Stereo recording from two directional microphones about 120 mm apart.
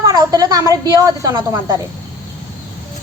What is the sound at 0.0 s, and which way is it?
A woman's voice, 35° right (ahead or behind).